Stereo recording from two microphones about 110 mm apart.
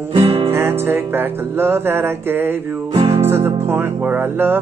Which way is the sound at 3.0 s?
70° right (ahead or behind).